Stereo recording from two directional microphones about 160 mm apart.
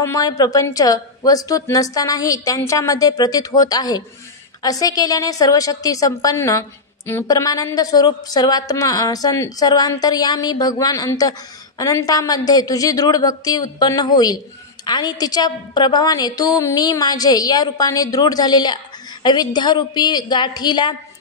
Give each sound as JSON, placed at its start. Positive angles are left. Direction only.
{"t": 0.0, "sound": "a woman's voice", "side_deg": 20}